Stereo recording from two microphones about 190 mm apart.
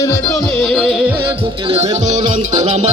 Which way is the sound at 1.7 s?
35° right (ahead or behind).